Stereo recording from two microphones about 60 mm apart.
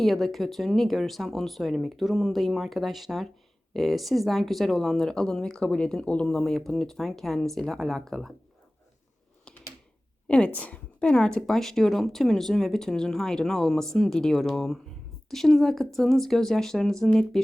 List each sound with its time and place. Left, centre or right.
0.0 s a woman's voice: centre
6.2 s speech: centre
9.4 s a sound: centre
10.2 s a woman's voice: centre